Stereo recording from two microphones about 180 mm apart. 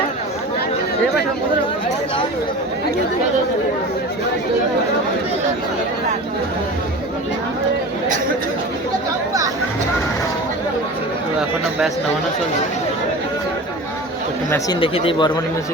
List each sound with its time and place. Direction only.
14.8 s speech: 30° left (ahead or behind)